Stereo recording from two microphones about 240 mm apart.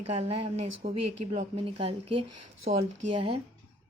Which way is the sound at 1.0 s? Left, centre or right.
Right.